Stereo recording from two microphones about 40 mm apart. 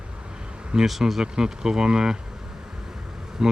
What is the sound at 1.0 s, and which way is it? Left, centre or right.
Speech, centre.